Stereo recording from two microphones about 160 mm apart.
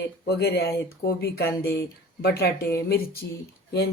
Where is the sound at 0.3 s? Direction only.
90° left.